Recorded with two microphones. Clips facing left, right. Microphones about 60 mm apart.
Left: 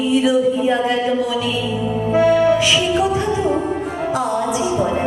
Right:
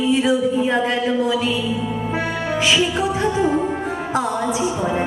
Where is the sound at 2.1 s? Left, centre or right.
Right.